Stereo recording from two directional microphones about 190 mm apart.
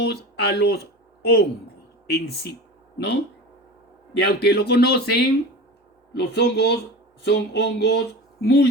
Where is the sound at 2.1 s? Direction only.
60° left (ahead or behind).